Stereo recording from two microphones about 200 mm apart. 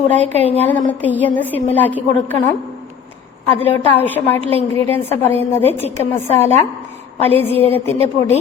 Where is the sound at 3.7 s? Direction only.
10° left (ahead or behind).